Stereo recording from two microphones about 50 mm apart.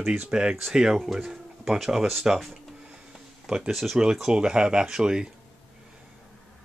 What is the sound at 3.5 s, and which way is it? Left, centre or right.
Speech, centre.